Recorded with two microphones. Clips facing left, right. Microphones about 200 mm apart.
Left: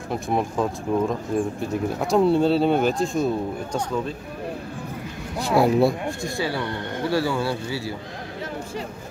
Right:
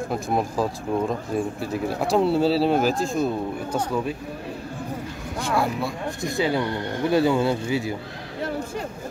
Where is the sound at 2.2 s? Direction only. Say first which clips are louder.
Left 2 dB; 5° right (ahead or behind).